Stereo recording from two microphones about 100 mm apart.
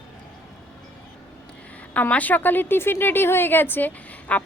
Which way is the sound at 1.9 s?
15° left (ahead or behind).